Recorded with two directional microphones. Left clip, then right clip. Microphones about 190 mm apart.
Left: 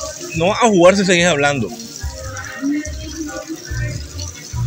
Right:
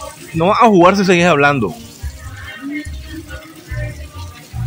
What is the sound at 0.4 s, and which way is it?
Speech, 25° right (ahead or behind).